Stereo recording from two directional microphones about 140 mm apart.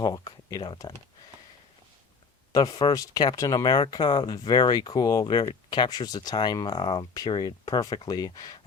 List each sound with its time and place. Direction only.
0.0 s speech: 25° left (ahead or behind)
2.5 s speech: 25° left (ahead or behind)